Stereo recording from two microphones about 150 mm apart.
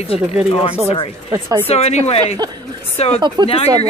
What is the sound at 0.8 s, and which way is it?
Speech, 40° left (ahead or behind).